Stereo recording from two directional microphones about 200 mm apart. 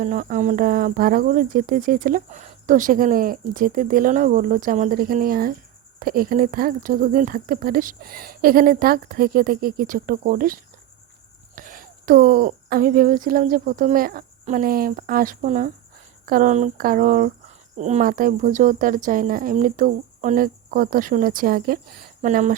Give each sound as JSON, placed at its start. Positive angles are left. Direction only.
{"t": 0.0, "sound": "speech", "side_deg": -40}